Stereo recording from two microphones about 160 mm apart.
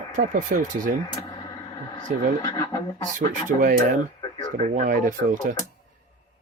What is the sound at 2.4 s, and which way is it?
Speech, 25° left (ahead or behind).